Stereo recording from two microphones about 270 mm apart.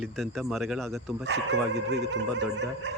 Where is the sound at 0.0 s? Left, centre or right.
Centre.